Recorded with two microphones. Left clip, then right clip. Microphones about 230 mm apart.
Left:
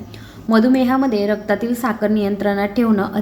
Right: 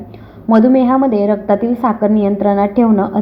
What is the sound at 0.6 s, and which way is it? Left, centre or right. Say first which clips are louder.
A woman's voice: right 5 dB; centre.